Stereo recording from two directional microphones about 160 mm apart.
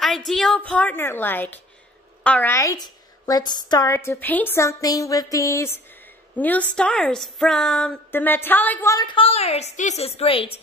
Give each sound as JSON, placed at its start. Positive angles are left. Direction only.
{"t": 0.0, "sound": "a woman's voice", "side_deg": 0}
{"t": 8.9, "sound": "a woman's voice", "side_deg": 30}